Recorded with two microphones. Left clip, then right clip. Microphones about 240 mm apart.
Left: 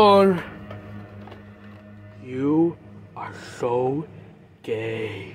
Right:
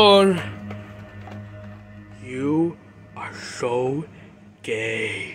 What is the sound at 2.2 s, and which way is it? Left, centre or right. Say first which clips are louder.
Music: left 1 dB; centre.